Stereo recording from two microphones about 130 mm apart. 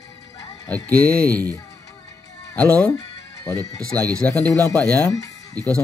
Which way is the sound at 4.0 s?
10° left (ahead or behind).